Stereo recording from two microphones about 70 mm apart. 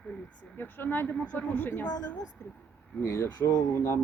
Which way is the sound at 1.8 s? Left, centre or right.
Left.